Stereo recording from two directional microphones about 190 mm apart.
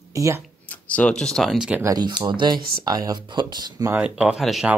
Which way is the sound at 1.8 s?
20° right (ahead or behind).